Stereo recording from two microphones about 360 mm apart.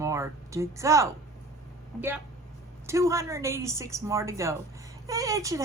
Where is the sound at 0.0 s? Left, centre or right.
Centre.